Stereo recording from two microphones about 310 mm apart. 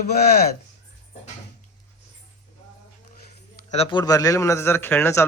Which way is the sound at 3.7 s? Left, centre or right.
Centre.